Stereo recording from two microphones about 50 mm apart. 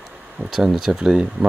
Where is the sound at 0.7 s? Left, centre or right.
Centre.